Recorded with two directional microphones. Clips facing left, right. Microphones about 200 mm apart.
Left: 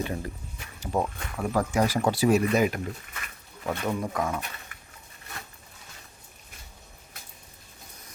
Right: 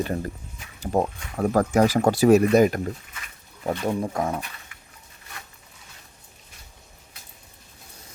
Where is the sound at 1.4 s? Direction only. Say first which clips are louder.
Right 6 dB; 45° right (ahead or behind).